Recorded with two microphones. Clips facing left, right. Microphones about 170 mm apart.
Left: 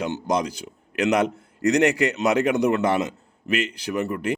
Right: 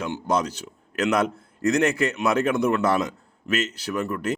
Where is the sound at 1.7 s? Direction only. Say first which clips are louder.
Left 2 dB; 15° left (ahead or behind).